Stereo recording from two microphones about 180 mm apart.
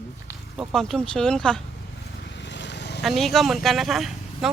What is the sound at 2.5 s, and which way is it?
Vehicle, 75° left (ahead or behind).